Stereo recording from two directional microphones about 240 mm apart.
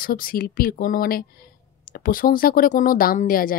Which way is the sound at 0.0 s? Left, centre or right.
Left.